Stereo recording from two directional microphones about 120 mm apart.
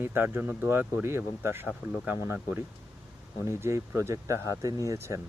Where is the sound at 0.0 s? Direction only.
20° right (ahead or behind).